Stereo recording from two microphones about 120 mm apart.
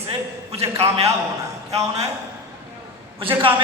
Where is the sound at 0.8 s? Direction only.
55° right (ahead or behind).